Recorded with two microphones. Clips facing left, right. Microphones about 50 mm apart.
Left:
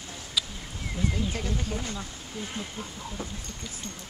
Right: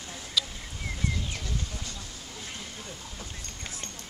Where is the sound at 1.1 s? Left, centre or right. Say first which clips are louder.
Left 5 dB; left.